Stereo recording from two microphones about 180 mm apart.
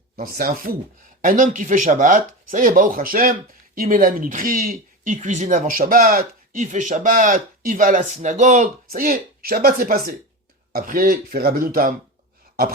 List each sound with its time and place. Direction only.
0.2 s speech: 55° right (ahead or behind)